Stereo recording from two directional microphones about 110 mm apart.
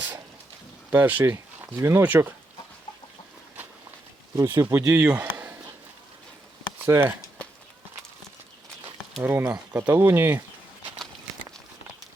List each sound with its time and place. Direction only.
0.9 s speech: 15° right (ahead or behind)
4.4 s speech: 25° right (ahead or behind)
4.9 s a sound: 15° right (ahead or behind)
6.8 s speech: 25° right (ahead or behind)
9.2 s speech: 15° right (ahead or behind)